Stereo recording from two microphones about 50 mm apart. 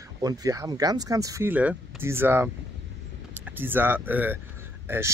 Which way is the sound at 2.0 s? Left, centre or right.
Right.